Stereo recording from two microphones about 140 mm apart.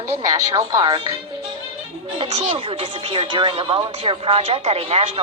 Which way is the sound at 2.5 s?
40° right (ahead or behind).